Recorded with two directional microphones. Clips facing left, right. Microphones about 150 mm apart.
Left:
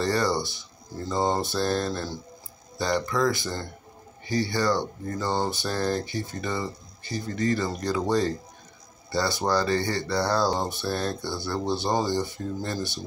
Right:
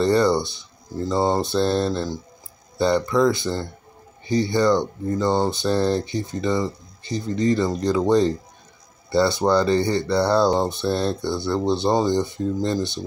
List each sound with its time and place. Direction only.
0.0 s speech: 25° right (ahead or behind)